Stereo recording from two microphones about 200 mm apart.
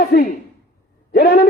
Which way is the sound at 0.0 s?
45° left (ahead or behind).